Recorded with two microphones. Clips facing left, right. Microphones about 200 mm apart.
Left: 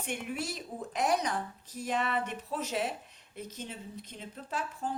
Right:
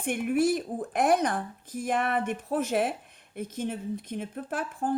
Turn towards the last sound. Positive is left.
turn(degrees=-50)  # may be behind; listen again after turning